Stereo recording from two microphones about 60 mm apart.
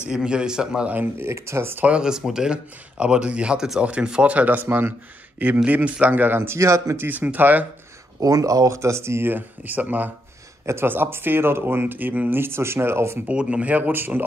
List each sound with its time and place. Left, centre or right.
0.1 s speech: centre
0.9 s speech: right
1.3 s speech: right
1.9 s speech: centre
4.6 s speech: right
5.7 s speech: right
6.6 s speech: right
7.0 s speech: right
8.2 s speech: right
9.3 s speech: right
10.6 s speech: right
13.3 s speech: centre